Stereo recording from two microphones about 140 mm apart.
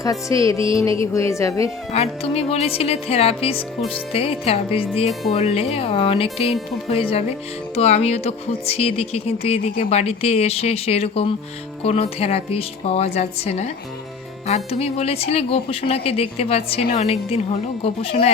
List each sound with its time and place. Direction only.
0.0 s music: 25° left (ahead or behind)
1.9 s speech: 50° left (ahead or behind)